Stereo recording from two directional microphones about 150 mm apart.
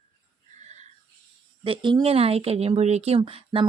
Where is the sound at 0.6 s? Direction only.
50° right (ahead or behind).